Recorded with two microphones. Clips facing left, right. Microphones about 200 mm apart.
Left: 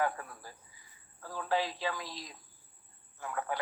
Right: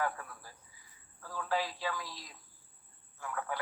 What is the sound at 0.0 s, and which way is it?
A man's voice, 25° left (ahead or behind).